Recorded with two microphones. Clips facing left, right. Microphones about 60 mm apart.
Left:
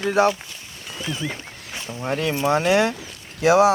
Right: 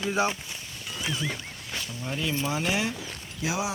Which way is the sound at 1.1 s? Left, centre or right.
Left.